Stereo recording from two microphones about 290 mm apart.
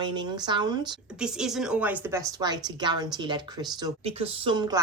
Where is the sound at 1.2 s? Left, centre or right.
Centre.